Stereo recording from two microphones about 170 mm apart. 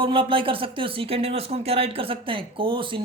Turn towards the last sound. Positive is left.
turn(degrees=-30)  # may be behind; listen again after turning